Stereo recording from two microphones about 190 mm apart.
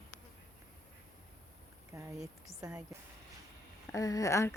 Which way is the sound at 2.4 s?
15° right (ahead or behind).